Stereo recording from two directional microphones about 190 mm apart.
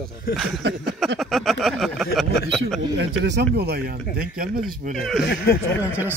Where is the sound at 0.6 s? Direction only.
60° right (ahead or behind).